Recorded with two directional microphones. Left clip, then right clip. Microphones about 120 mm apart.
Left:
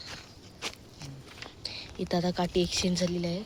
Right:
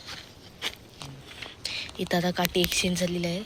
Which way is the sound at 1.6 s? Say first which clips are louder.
Right 5 dB; 10° left (ahead or behind).